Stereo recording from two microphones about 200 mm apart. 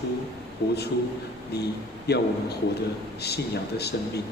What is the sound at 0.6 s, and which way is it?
A man's voice, 55° left (ahead or behind).